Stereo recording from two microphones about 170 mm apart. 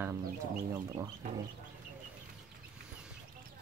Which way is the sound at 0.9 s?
30° right (ahead or behind).